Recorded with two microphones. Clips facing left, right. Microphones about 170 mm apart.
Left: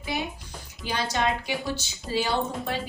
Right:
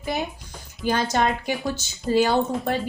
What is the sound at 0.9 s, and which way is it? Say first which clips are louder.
Speech: right 5 dB; 50° right (ahead or behind).